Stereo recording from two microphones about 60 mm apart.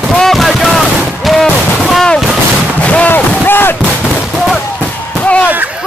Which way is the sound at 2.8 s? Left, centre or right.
Left.